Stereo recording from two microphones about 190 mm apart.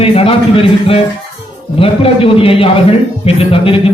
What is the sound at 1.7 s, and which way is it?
A man's voice, 30° left (ahead or behind).